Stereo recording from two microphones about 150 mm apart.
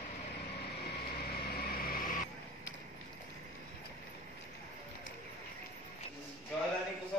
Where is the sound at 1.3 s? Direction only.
85° left.